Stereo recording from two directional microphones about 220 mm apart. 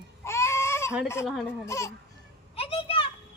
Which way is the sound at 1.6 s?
15° left (ahead or behind).